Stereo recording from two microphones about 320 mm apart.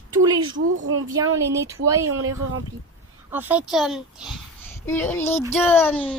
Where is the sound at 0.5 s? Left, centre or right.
Right.